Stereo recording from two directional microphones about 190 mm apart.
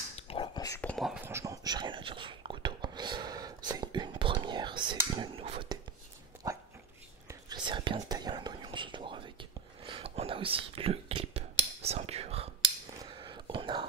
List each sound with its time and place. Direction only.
0.3 s whispering: 20° left (ahead or behind)
0.7 s whispering: 5° left (ahead or behind)
1.2 s whispering: 15° right (ahead or behind)
6.4 s dog: 20° right (ahead or behind)
7.2 s whispering: 20° right (ahead or behind)